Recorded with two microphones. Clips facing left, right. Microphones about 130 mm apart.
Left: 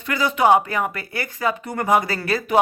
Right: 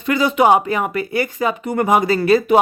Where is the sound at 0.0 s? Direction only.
20° right (ahead or behind).